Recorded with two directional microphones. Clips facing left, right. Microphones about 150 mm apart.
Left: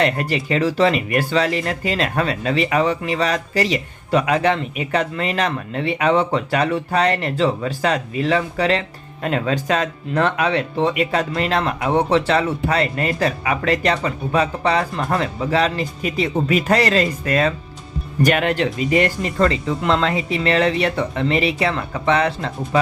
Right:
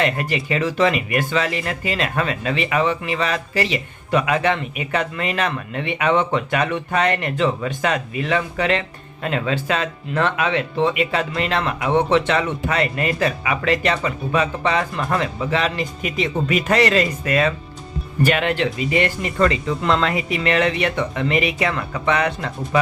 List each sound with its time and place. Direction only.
0.0 s speech: 40° left (ahead or behind)
19.8 s speech: 20° left (ahead or behind)